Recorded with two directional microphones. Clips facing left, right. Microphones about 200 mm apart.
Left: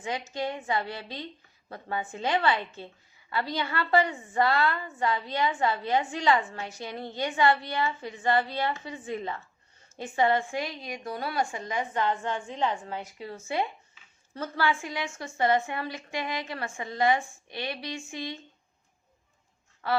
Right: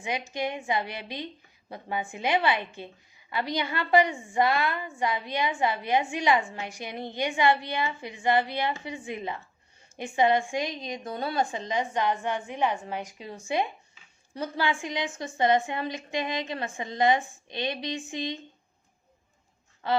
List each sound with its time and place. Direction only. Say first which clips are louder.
0.0 s a woman's voice: right 1 dB; 15° right (ahead or behind)
19.8 s a woman's voice: right 1 dB; 20° right (ahead or behind)